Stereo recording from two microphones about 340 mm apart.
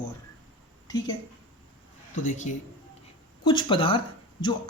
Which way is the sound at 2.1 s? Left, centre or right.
Left.